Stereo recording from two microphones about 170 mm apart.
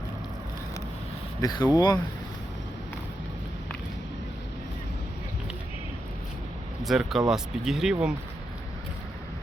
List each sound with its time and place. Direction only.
1.4 s speech: 20° left (ahead or behind)
6.8 s speech: centre (ahead or behind)